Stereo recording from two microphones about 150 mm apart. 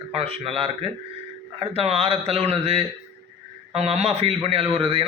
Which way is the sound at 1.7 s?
40° right (ahead or behind).